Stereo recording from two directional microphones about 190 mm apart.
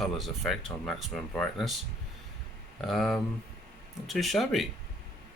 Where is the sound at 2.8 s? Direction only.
Centre (ahead or behind).